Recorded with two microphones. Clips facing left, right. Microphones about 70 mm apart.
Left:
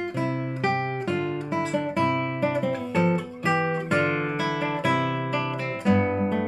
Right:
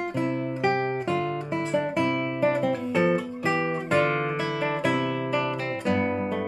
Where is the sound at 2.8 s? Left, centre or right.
Centre.